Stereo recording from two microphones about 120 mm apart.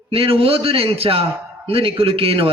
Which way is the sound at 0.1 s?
50° right (ahead or behind).